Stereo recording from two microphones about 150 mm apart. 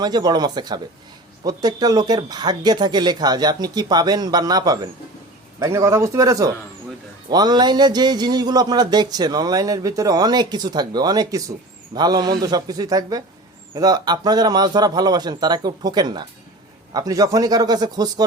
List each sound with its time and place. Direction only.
0.0 s speech: 25° right (ahead or behind)